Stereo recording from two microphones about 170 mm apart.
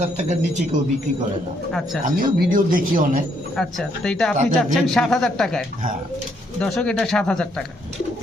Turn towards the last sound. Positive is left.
turn(degrees=5)  # may be behind; listen again after turning